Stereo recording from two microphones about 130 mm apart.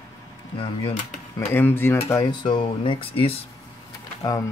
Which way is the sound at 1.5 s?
15° left (ahead or behind).